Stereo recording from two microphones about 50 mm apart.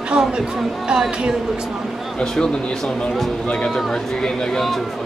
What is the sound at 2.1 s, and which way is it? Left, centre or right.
Speech, centre.